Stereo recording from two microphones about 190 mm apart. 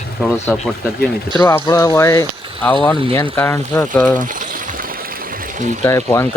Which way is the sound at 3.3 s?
15° left (ahead or behind).